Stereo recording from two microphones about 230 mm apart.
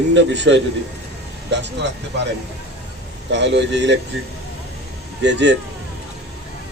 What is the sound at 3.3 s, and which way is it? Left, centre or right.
Speech, right.